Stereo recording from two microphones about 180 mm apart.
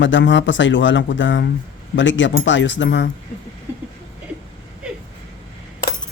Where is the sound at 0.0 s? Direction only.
90° left.